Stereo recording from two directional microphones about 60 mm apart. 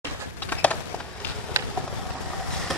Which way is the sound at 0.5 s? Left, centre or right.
Left.